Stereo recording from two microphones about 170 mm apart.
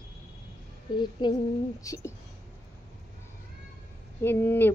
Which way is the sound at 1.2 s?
25° left (ahead or behind).